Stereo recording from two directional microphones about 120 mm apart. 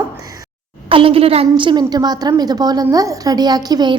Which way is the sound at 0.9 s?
50° right (ahead or behind).